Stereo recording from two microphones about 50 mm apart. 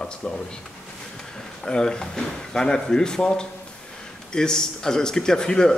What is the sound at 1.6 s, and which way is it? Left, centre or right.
A man's voice, centre.